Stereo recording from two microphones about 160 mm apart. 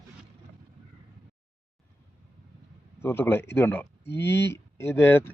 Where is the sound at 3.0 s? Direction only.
15° left (ahead or behind).